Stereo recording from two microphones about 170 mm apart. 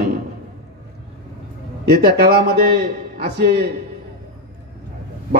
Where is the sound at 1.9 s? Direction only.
65° right (ahead or behind).